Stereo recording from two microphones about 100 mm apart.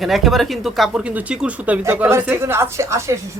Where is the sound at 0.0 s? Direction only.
Centre (ahead or behind).